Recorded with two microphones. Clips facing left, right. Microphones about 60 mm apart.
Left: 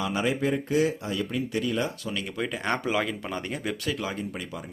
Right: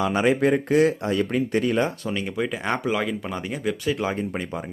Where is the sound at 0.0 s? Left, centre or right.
Right.